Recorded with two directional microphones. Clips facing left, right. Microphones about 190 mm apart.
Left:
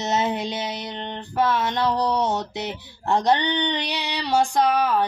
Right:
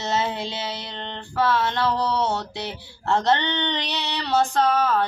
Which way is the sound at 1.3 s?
20° left (ahead or behind).